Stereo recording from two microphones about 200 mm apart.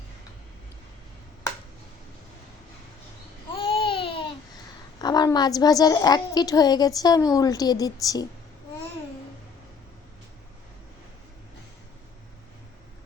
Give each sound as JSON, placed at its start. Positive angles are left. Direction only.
{"t": 3.6, "sound": "babbling", "side_deg": 25}
{"t": 4.9, "sound": "a woman's voice", "side_deg": 20}